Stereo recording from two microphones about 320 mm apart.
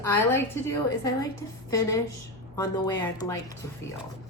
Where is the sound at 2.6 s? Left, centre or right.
Centre.